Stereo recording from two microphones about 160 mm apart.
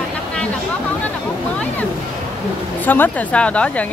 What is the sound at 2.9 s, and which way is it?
A woman's voice, 10° left (ahead or behind).